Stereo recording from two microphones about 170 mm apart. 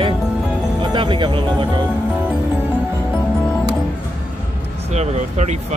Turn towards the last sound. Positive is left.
turn(degrees=-40)  # may be behind; listen again after turning